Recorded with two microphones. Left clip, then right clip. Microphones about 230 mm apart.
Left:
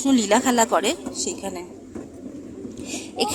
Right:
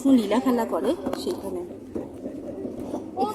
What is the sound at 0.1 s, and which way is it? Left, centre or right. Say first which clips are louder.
Speech: left 3 dB; left.